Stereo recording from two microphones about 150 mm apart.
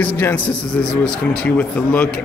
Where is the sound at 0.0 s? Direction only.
10° left (ahead or behind).